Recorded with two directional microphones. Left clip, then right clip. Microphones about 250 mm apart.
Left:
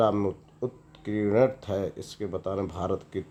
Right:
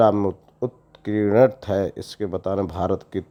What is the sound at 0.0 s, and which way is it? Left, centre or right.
Speech, right.